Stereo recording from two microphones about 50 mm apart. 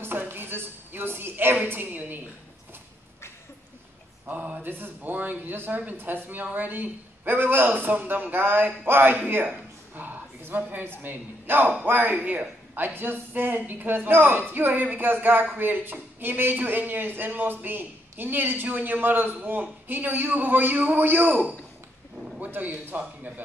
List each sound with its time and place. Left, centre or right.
0.3 s a sound: right
4.3 s a woman's voice: right
4.6 s a woman's voice: right
9.9 s a sound: right
11.0 s a woman's voice: right
22.4 s a woman's voice: right